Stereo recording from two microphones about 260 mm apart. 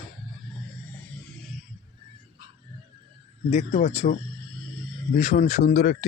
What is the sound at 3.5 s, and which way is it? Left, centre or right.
Speech, left.